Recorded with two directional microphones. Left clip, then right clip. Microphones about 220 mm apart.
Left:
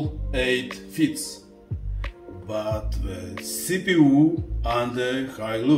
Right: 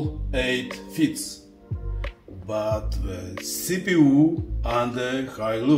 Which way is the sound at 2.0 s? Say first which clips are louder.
Right 1 dB; centre (ahead or behind).